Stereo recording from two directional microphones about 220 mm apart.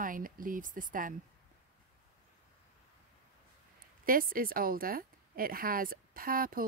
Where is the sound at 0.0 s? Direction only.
40° right (ahead or behind).